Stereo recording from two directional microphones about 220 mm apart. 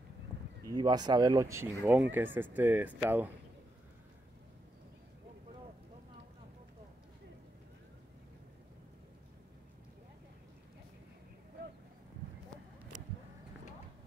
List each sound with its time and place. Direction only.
0.7 s speech: 20° right (ahead or behind)